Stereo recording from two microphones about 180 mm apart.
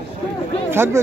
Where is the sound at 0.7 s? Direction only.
15° right (ahead or behind).